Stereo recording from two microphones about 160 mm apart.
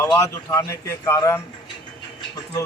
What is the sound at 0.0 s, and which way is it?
A man's voice, 15° left (ahead or behind).